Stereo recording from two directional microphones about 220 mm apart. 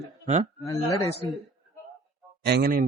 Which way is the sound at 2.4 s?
45° right (ahead or behind).